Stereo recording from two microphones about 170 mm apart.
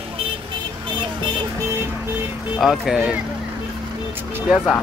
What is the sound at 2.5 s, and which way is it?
Speech, centre (ahead or behind).